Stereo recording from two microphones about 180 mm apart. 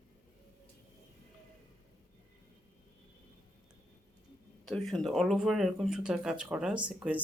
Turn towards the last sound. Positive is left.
turn(degrees=-5)  # may be behind; listen again after turning